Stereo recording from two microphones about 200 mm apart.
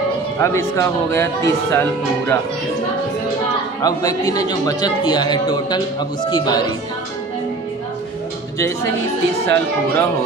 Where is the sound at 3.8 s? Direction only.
20° left (ahead or behind).